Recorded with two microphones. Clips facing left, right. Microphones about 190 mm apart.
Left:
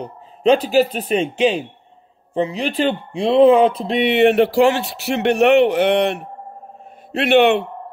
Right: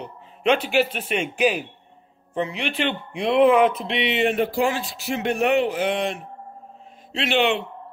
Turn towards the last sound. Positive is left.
turn(degrees=60)  # may be behind; listen again after turning